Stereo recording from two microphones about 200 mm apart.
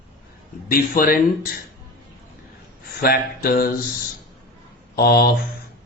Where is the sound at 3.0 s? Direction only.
50° left (ahead or behind).